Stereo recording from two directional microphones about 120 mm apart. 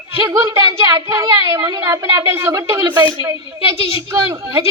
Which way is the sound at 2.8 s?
35° right (ahead or behind).